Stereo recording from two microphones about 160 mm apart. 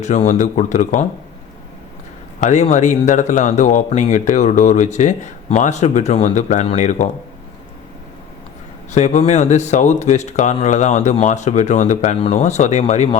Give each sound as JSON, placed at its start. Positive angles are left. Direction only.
{"t": 0.0, "sound": "speech", "side_deg": 50}
{"t": 2.4, "sound": "speech", "side_deg": 45}
{"t": 8.9, "sound": "speech", "side_deg": 45}